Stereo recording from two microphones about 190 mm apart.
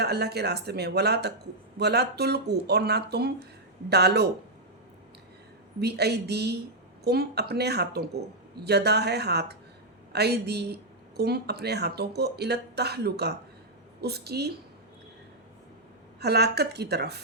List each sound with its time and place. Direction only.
0.0 s speech: 60° right (ahead or behind)
5.8 s speech: 60° right (ahead or behind)
16.2 s speech: 60° right (ahead or behind)